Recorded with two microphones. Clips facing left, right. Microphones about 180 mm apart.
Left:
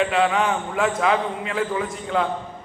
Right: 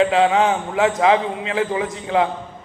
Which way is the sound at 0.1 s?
20° right (ahead or behind).